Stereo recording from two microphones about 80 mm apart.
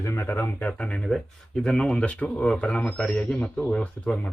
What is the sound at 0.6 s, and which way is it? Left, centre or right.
Speech, centre.